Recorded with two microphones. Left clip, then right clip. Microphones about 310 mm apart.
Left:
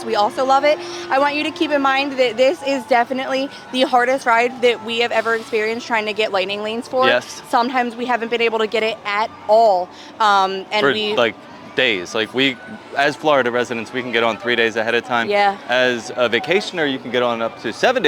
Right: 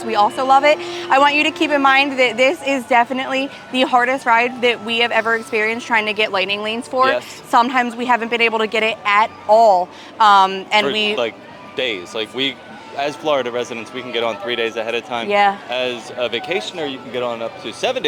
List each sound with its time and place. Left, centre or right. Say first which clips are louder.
0.1 s a woman's voice: right 2 dB; centre
11.1 s speech: left 3 dB; left
15.3 s a woman's voice: right 3 dB; centre
15.7 s speech: left 5 dB; left